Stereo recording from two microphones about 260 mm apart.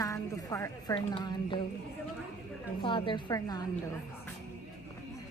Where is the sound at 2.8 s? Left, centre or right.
Centre.